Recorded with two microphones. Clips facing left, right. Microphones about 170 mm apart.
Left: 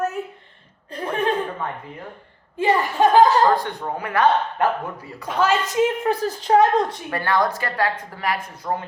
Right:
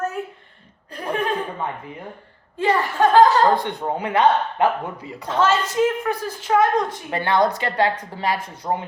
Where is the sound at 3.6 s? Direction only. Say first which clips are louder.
Right 3 dB; 20° right (ahead or behind).